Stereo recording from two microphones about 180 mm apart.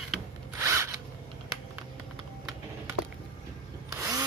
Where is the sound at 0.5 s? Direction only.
15° right (ahead or behind).